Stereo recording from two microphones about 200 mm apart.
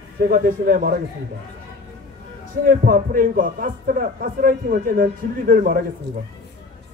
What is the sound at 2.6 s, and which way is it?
Speech, 45° right (ahead or behind).